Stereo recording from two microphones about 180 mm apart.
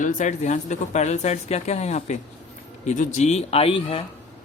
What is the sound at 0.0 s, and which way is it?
Speech, 45° left (ahead or behind).